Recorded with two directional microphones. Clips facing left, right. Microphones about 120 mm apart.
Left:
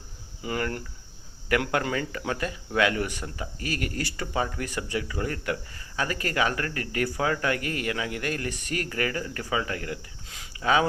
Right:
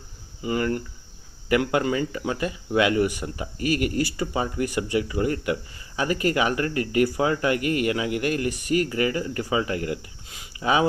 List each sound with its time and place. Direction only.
0.4 s speech: 5° right (ahead or behind)